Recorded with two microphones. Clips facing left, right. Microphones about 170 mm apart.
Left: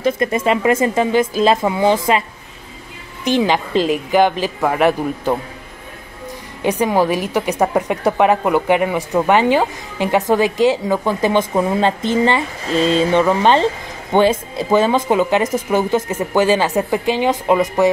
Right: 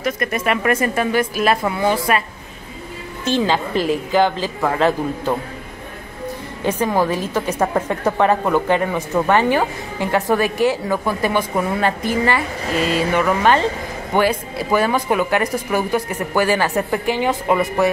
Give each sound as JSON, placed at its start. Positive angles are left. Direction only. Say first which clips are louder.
{"t": 0.0, "sound": "speech", "louder": "left 4 dB", "side_deg": 25}
{"t": 3.3, "sound": "a woman's voice", "louder": "left 2 dB", "side_deg": 15}
{"t": 6.6, "sound": "a woman's voice", "louder": "left 3 dB", "side_deg": 15}